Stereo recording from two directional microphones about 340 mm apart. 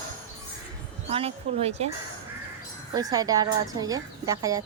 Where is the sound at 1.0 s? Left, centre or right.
Centre.